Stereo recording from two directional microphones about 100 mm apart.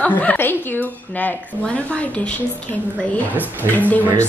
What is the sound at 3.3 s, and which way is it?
Speech, 15° right (ahead or behind).